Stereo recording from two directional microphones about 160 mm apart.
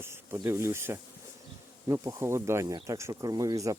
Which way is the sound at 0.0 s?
15° right (ahead or behind).